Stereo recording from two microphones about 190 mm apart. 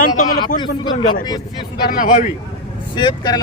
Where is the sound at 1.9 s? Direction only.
45° left (ahead or behind).